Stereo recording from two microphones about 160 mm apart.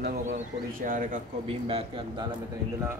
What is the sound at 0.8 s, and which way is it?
Speech, 55° right (ahead or behind).